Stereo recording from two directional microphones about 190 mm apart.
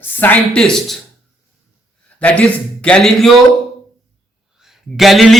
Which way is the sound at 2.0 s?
5° left (ahead or behind).